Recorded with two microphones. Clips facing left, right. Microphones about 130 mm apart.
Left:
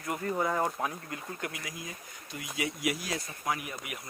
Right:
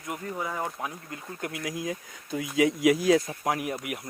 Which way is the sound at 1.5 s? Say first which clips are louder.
Right 10 dB; 80° right.